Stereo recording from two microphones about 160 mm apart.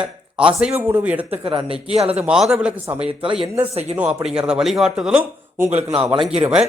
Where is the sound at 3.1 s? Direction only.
35° right (ahead or behind).